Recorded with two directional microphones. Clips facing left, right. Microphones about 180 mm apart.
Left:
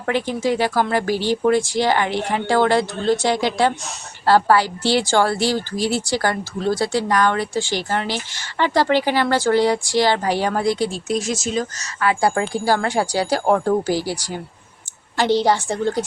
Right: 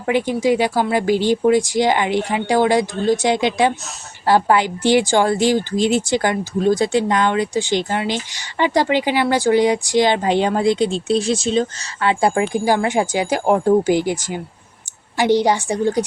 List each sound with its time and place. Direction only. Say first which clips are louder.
0.0 s speech: right 3 dB; 15° right (ahead or behind)